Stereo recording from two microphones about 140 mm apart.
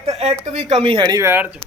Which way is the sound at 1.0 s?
25° right (ahead or behind).